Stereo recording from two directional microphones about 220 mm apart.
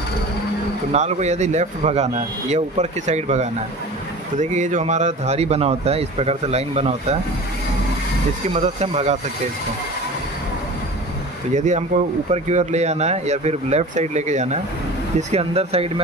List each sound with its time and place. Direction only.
0.9 s a man's voice: 30° right (ahead or behind)
8.5 s a man's voice: 30° right (ahead or behind)
11.5 s a man's voice: 30° right (ahead or behind)